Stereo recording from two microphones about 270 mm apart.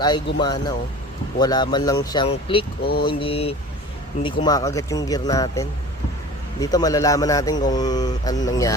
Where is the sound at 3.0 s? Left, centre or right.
Centre.